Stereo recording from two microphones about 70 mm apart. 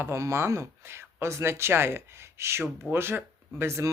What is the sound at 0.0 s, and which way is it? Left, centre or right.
Speech, right.